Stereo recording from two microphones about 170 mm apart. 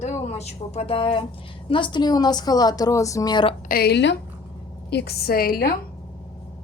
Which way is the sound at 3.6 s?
60° left (ahead or behind).